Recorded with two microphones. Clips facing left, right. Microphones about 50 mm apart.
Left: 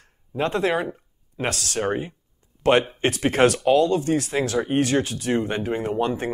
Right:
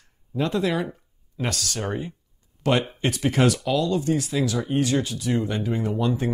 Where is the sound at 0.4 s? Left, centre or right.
Left.